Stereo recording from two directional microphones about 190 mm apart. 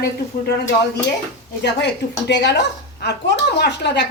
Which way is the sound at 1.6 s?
60° left (ahead or behind).